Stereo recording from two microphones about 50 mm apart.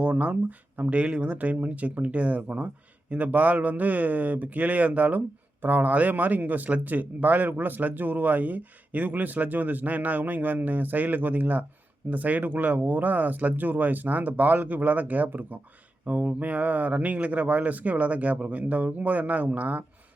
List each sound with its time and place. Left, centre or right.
0.0 s speech: right